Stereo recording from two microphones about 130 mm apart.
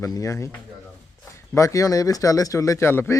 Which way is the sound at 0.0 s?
25° left (ahead or behind).